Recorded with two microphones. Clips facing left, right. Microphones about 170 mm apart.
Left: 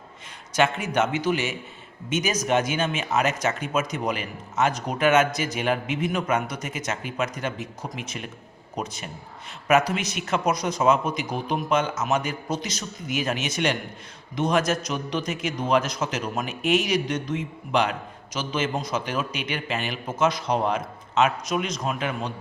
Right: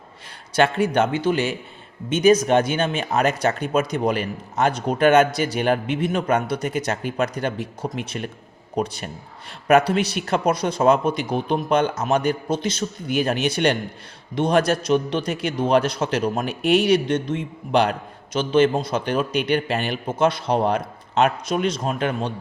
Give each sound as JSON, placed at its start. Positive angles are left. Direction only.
{"t": 0.5, "sound": "a man's voice", "side_deg": -30}